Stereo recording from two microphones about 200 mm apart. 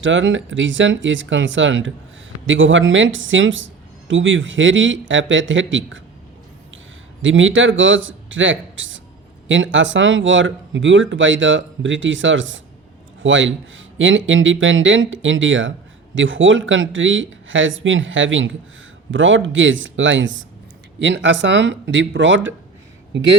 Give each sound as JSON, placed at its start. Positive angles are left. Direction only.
{"t": 0.0, "sound": "speech", "side_deg": -70}
{"t": 7.2, "sound": "speech", "side_deg": -75}